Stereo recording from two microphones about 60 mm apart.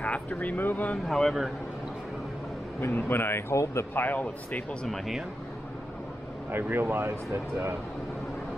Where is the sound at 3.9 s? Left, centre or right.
Left.